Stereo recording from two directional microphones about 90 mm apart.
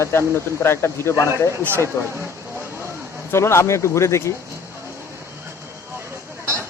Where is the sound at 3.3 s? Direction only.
30° left (ahead or behind).